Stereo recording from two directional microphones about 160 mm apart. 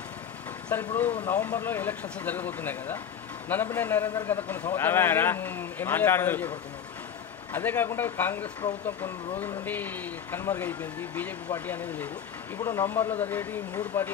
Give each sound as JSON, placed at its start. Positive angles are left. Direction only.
{"t": 0.7, "sound": "a man's voice", "side_deg": 10}
{"t": 7.5, "sound": "a man's voice", "side_deg": 15}
{"t": 9.7, "sound": "a man's voice", "side_deg": 10}